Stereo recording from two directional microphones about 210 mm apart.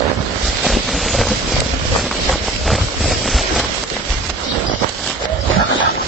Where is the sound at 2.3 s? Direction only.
Centre (ahead or behind).